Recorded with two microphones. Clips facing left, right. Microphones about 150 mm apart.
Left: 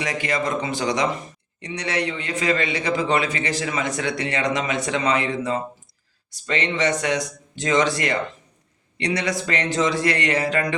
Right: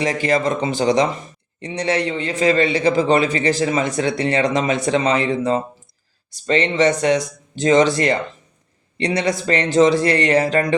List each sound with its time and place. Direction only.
0.0 s a man's voice: 35° right (ahead or behind)
10.3 s speech: 45° right (ahead or behind)